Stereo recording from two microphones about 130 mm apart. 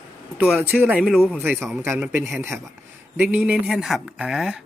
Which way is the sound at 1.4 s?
15° right (ahead or behind).